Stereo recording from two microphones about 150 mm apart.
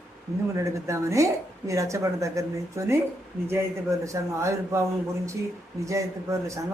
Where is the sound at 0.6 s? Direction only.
20° right (ahead or behind).